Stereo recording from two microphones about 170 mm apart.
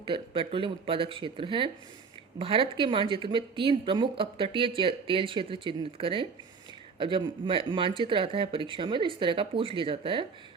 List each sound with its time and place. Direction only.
0.0 s a woman's voice: 30° right (ahead or behind)